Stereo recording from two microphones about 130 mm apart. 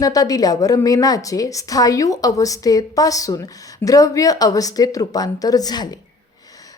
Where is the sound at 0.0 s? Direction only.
30° left (ahead or behind).